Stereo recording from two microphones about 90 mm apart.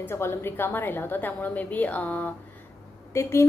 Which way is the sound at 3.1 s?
30° left (ahead or behind).